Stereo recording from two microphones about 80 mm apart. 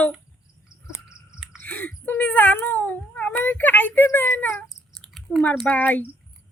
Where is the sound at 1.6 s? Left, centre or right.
Left.